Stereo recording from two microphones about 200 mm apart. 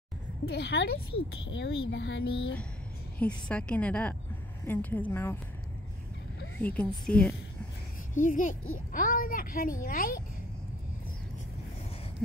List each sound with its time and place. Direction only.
0.5 s speech: 55° left (ahead or behind)
1.9 s speech: 65° left (ahead or behind)
3.2 s a woman's voice: 5° left (ahead or behind)
6.6 s a woman's voice: 5° left (ahead or behind)
8.1 s a child's voice: 40° left (ahead or behind)